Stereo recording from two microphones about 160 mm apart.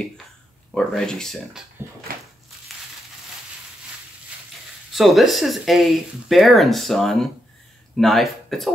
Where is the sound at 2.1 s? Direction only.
65° right (ahead or behind).